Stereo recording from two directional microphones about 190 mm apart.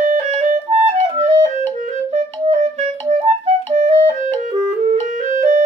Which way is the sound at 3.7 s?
35° right (ahead or behind).